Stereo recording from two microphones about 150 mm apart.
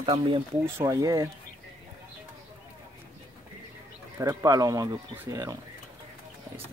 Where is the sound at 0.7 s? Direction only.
20° right (ahead or behind).